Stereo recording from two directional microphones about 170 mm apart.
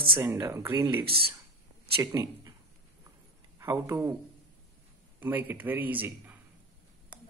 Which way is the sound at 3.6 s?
15° right (ahead or behind).